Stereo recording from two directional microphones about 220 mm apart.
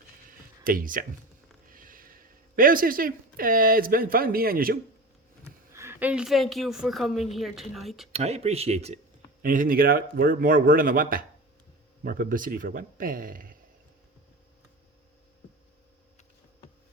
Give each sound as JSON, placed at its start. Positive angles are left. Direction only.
{"t": 0.3, "sound": "a sound", "side_deg": -40}
{"t": 1.7, "sound": "speech", "side_deg": -40}
{"t": 5.7, "sound": "a woman's voice", "side_deg": -10}
{"t": 8.1, "sound": "a man's voice", "side_deg": -30}